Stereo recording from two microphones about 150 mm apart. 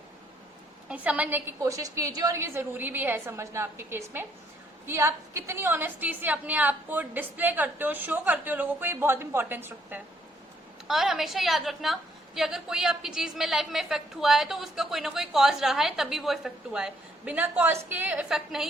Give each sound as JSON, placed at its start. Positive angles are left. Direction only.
{"t": 0.9, "sound": "a woman's voice", "side_deg": -10}
{"t": 10.8, "sound": "a woman's voice", "side_deg": -5}